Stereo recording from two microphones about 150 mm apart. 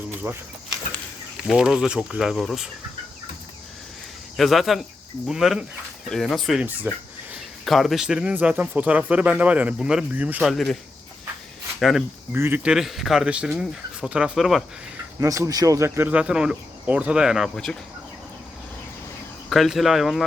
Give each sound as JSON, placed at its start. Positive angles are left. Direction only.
{"t": 0.2, "sound": "speech", "side_deg": -20}
{"t": 1.5, "sound": "speech", "side_deg": -5}
{"t": 4.4, "sound": "speech", "side_deg": 0}
{"t": 6.9, "sound": "speech", "side_deg": -15}
{"t": 7.6, "sound": "speech", "side_deg": 0}
{"t": 10.5, "sound": "speech", "side_deg": 0}
{"t": 11.8, "sound": "speech", "side_deg": 0}
{"t": 12.3, "sound": "speech", "side_deg": -15}
{"t": 15.2, "sound": "speech", "side_deg": -20}
{"t": 19.5, "sound": "speech", "side_deg": 0}